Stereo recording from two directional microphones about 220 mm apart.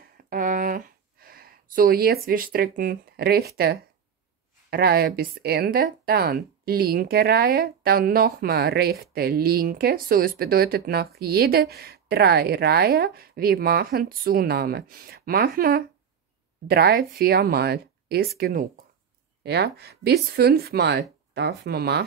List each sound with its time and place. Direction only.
0.3 s speech: 35° right (ahead or behind)